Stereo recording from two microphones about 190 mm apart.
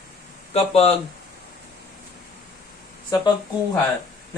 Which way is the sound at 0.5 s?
30° left (ahead or behind).